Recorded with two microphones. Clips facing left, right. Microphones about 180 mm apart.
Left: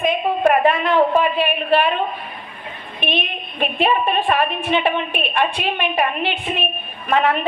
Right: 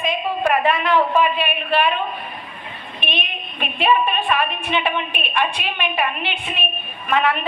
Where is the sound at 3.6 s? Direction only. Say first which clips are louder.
Left 1 dB; 45° left (ahead or behind).